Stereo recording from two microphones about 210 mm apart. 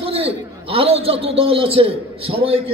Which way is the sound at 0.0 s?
25° right (ahead or behind).